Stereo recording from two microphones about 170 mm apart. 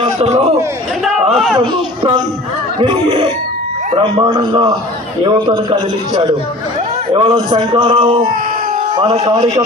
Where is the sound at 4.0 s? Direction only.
30° right (ahead or behind).